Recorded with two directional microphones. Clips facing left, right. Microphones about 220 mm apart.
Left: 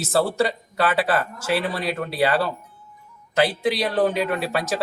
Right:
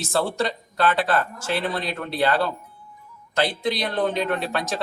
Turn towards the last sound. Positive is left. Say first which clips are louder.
# left 2 dB
turn(degrees=5)  # may be behind; listen again after turning